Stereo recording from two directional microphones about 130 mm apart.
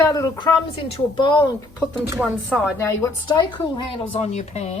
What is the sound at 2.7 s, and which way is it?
Speech, 20° left (ahead or behind).